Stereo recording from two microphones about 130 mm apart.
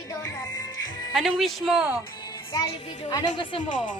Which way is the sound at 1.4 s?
Centre (ahead or behind).